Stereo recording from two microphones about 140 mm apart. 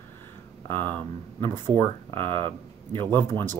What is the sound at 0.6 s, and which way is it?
Speech, 15° left (ahead or behind).